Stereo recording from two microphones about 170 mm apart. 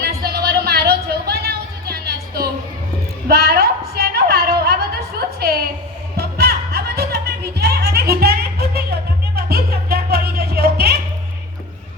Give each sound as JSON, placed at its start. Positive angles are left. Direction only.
{"t": 0.0, "sound": "music", "side_deg": -65}
{"t": 3.2, "sound": "a sound", "side_deg": -65}
{"t": 6.1, "sound": "music", "side_deg": -65}